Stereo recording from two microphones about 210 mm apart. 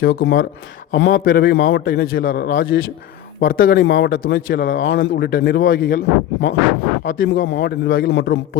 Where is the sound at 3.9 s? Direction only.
60° left (ahead or behind).